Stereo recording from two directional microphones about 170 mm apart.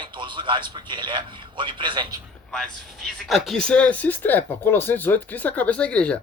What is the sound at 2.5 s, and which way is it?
Speech, centre (ahead or behind).